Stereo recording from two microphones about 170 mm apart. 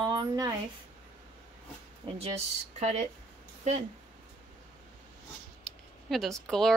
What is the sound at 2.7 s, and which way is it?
Speech, 45° right (ahead or behind).